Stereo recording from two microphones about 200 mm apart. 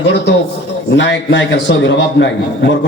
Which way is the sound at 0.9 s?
60° left (ahead or behind).